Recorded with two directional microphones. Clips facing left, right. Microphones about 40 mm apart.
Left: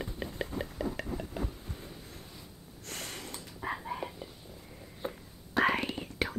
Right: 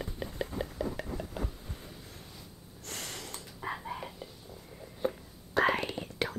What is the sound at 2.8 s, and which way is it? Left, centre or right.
Snort, left.